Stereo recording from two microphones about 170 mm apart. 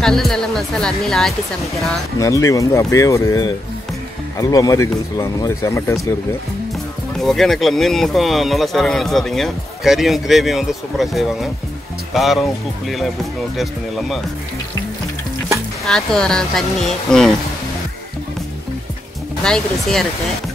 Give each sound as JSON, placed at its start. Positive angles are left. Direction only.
{"t": 0.0, "sound": "speech", "side_deg": 0}
{"t": 2.1, "sound": "speech", "side_deg": 20}
{"t": 7.2, "sound": "speech", "side_deg": 0}
{"t": 15.8, "sound": "speech", "side_deg": 0}
{"t": 19.4, "sound": "speech", "side_deg": 5}